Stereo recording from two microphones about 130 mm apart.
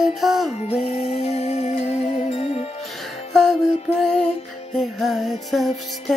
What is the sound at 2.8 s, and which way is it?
Music, centre (ahead or behind).